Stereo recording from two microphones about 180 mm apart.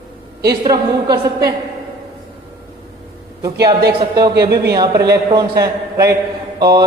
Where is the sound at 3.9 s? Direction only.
20° right (ahead or behind).